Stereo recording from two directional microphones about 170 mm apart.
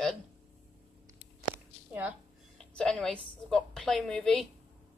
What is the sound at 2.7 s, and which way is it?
A woman's voice, 5° left (ahead or behind).